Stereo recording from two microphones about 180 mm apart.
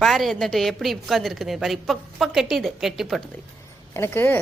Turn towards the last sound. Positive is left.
turn(degrees=10)  # may be behind; listen again after turning